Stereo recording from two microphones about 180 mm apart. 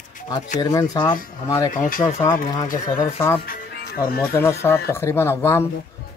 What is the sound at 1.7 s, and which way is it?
Speech, 50° left (ahead or behind).